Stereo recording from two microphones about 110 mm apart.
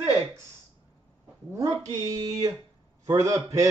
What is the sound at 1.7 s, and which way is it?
A man's voice, 30° right (ahead or behind).